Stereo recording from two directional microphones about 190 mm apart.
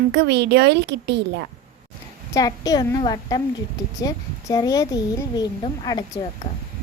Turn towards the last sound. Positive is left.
turn(degrees=20)  # may be behind; listen again after turning